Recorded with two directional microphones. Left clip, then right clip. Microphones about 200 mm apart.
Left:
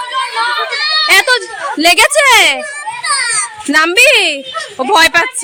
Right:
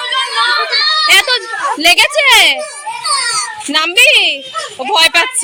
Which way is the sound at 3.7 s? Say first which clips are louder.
Left 1 dB; 50° left (ahead or behind).